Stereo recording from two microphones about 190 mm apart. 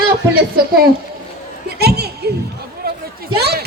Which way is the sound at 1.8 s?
55° right (ahead or behind).